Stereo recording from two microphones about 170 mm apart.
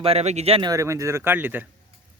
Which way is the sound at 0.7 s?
20° right (ahead or behind).